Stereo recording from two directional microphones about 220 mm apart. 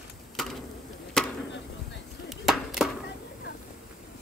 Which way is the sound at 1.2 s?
5° left (ahead or behind).